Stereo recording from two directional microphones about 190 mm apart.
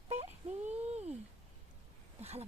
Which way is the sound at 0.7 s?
35° right (ahead or behind).